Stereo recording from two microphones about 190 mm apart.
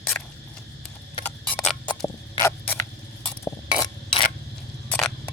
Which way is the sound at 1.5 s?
5° left (ahead or behind).